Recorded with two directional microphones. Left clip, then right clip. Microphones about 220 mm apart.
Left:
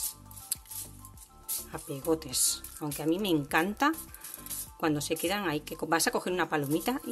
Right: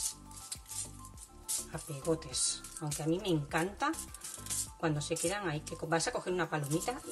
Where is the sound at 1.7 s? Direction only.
45° left (ahead or behind).